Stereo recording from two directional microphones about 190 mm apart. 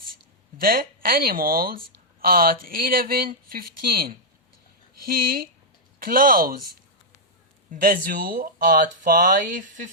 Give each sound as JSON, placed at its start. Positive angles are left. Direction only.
{"t": 0.6, "sound": "speech", "side_deg": -50}
{"t": 7.7, "sound": "speech", "side_deg": -45}